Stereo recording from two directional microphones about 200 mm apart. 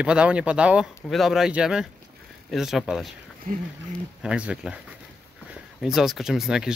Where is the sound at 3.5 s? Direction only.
45° right (ahead or behind).